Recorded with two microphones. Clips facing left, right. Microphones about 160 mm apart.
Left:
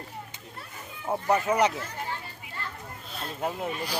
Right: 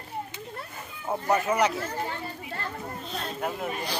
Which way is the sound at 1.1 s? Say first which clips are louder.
Even; 15° left (ahead or behind).